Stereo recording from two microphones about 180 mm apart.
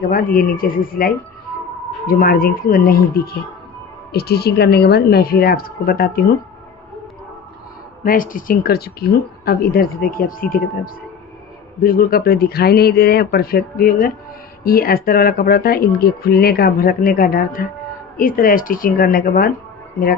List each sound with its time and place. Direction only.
0.1 s speech: 50° left (ahead or behind)
8.0 s speech: 50° left (ahead or behind)